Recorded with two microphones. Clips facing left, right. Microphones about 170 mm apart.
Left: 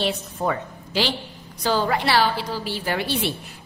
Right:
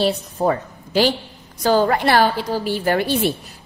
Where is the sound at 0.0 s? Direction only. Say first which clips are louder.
Right 6 dB; 40° right (ahead or behind).